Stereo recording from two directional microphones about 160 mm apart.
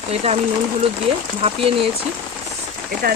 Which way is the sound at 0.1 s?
40° right (ahead or behind).